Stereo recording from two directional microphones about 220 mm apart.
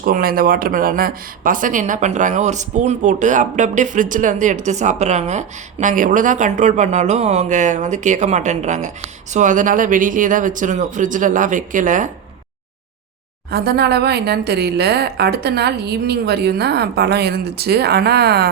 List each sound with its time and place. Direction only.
0.0 s speech: 40° right (ahead or behind)
13.5 s a woman's voice: 45° right (ahead or behind)